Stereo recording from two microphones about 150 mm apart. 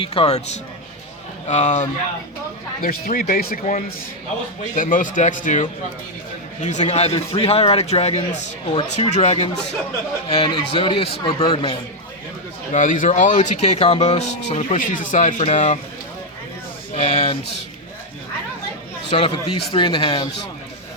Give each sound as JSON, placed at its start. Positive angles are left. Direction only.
{"t": 0.0, "sound": "speech", "side_deg": 40}
{"t": 2.8, "sound": "a man's voice", "side_deg": 65}
{"t": 12.7, "sound": "speech", "side_deg": 60}
{"t": 16.9, "sound": "a sound", "side_deg": 45}
{"t": 19.1, "sound": "a man's voice", "side_deg": 35}